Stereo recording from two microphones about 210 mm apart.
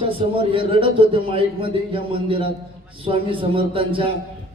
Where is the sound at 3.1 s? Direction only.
25° right (ahead or behind).